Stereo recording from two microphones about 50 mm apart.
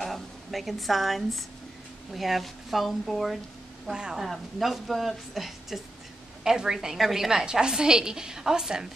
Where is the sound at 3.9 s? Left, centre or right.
Centre.